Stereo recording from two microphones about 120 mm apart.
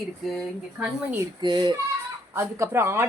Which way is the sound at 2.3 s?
20° right (ahead or behind).